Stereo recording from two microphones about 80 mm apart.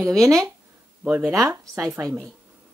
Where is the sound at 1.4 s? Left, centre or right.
Right.